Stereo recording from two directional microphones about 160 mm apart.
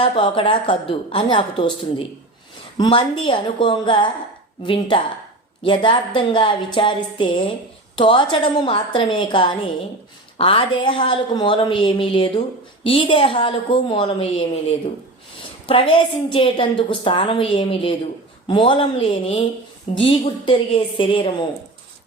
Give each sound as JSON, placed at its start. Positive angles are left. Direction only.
{"t": 0.0, "sound": "a woman's voice", "side_deg": 30}
{"t": 2.7, "sound": "a woman's voice", "side_deg": 30}
{"t": 15.6, "sound": "a woman's voice", "side_deg": 35}